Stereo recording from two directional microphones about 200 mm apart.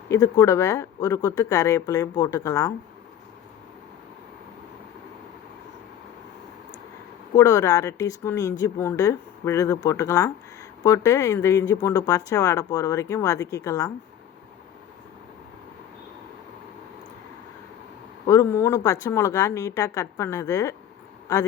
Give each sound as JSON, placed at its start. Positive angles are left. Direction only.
{"t": 0.1, "sound": "speech", "side_deg": 15}
{"t": 7.3, "sound": "speech", "side_deg": 15}
{"t": 18.3, "sound": "speech", "side_deg": 15}